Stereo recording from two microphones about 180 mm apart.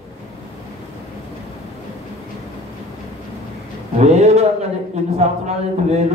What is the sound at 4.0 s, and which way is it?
A man's voice, 40° right (ahead or behind).